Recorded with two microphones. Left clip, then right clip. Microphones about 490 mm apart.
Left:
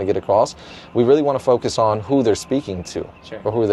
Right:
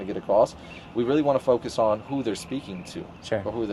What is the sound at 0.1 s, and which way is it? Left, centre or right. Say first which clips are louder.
Speech: left 4 dB; left.